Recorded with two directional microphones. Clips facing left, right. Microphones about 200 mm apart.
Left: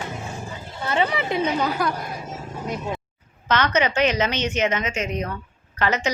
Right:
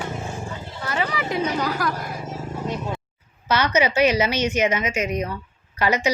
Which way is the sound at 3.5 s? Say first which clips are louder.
Right 1 dB; 10° right (ahead or behind).